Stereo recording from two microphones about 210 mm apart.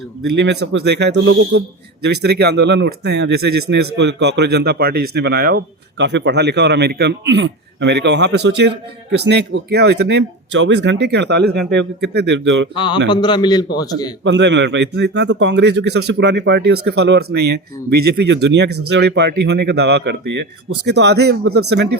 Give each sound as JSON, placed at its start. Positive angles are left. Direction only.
{"t": 0.3, "sound": "a man's voice", "side_deg": -55}
{"t": 12.7, "sound": "a man's voice", "side_deg": 25}
{"t": 14.3, "sound": "a man's voice", "side_deg": -55}